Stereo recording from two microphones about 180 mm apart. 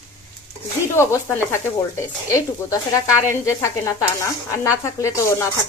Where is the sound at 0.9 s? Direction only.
15° left (ahead or behind).